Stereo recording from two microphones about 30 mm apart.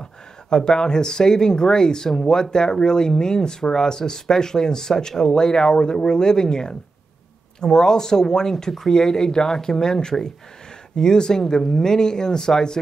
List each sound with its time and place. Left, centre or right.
0.7 s speech: left